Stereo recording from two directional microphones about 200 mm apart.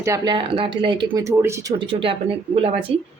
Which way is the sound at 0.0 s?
20° right (ahead or behind).